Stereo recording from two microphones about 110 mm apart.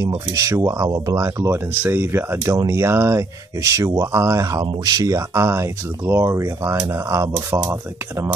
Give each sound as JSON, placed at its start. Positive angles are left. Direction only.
{"t": 0.3, "sound": "speech", "side_deg": -30}